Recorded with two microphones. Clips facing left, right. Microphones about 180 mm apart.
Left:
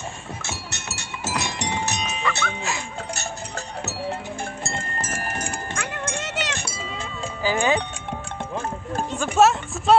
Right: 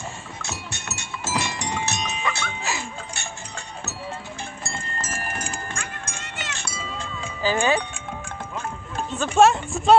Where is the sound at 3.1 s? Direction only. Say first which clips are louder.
Left 5 dB; 40° left (ahead or behind).